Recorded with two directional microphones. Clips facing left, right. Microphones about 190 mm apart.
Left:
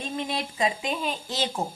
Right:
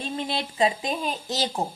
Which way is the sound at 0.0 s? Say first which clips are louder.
Right 1 dB; 30° right (ahead or behind).